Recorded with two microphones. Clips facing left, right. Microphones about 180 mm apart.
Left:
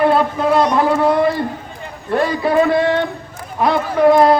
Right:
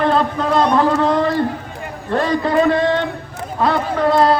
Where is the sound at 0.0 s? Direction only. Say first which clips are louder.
Left 2 dB; 10° left (ahead or behind).